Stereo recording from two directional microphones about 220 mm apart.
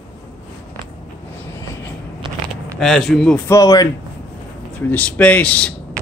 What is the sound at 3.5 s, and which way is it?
Speech, 15° left (ahead or behind).